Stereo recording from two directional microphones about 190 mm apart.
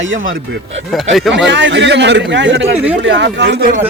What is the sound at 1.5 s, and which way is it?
Speech, 70° right (ahead or behind).